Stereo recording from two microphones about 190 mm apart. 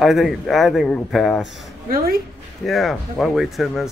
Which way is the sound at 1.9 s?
50° right (ahead or behind).